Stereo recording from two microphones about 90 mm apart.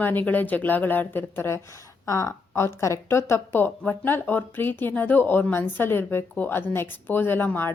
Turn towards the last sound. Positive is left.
turn(degrees=25)  # may be behind; listen again after turning